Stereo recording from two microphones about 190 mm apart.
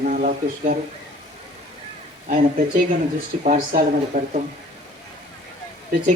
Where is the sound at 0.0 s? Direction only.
40° right (ahead or behind).